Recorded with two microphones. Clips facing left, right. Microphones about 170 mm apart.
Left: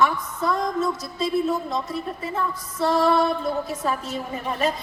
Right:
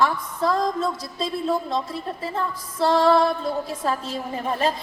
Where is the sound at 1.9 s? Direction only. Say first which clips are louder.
Even; 30° right (ahead or behind).